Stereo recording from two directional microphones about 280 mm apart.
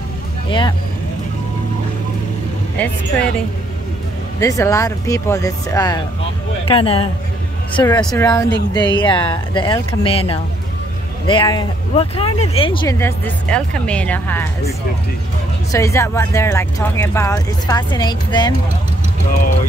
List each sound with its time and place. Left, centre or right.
0.5 s speech: centre
2.8 s speech: centre
4.4 s a man's voice: centre
7.8 s speech: centre
15.7 s speech: centre